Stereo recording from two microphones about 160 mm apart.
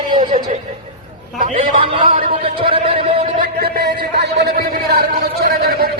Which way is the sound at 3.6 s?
80° right.